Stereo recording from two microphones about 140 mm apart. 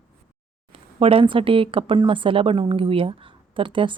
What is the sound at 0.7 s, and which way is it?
Speech, 40° right (ahead or behind).